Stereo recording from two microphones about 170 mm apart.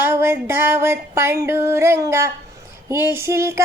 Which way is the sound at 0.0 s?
15° right (ahead or behind).